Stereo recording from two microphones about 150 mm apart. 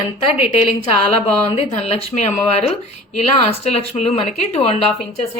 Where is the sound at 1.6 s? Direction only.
45° left (ahead or behind).